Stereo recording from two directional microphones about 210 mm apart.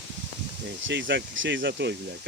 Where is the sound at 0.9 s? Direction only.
60° right (ahead or behind).